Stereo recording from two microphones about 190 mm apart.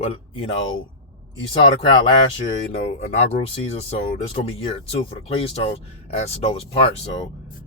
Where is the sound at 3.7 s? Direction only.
30° left (ahead or behind).